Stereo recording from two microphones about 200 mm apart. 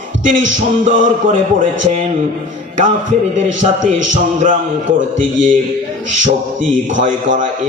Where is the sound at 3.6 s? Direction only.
40° right (ahead or behind).